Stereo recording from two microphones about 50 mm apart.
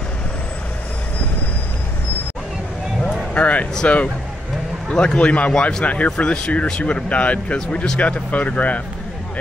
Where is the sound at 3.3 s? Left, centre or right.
Left.